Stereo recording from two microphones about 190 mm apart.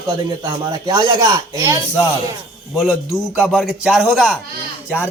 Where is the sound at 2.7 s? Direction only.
Centre (ahead or behind).